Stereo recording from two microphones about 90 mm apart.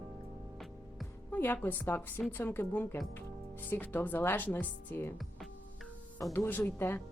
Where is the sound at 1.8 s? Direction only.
25° left (ahead or behind).